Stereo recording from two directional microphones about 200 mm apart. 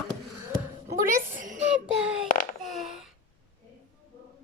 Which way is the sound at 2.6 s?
Centre (ahead or behind).